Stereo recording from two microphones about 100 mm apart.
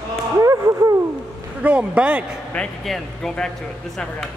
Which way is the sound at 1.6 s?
15° right (ahead or behind).